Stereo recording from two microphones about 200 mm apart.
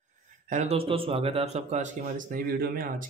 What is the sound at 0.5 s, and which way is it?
A man's voice, 35° right (ahead or behind).